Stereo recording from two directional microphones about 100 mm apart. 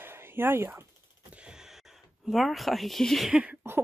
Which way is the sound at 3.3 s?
10° right (ahead or behind).